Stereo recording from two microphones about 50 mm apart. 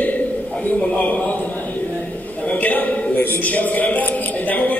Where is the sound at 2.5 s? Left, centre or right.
Left.